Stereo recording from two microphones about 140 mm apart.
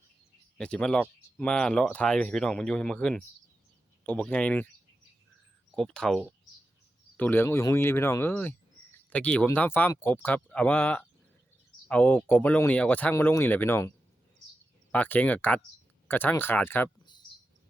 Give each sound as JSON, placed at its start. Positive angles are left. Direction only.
{"t": 0.6, "sound": "speech", "side_deg": 5}
{"t": 5.7, "sound": "speech", "side_deg": 5}
{"t": 7.2, "sound": "speech", "side_deg": 15}
{"t": 14.9, "sound": "speech", "side_deg": 10}